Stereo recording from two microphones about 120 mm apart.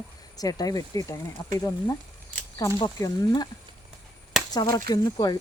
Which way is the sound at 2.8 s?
35° left (ahead or behind).